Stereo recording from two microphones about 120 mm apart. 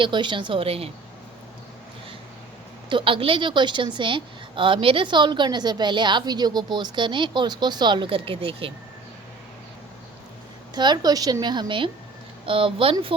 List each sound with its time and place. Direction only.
0.0 s a woman's voice: 40° right (ahead or behind)
2.9 s a woman's voice: 45° right (ahead or behind)
10.8 s a woman's voice: 35° right (ahead or behind)